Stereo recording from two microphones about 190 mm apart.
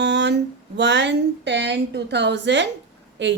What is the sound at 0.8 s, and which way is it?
A woman's voice, 65° right (ahead or behind).